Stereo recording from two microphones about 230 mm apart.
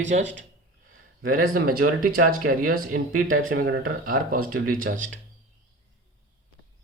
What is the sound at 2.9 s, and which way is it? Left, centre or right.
Speech, right.